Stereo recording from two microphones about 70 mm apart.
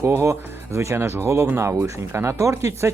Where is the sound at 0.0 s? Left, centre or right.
Right.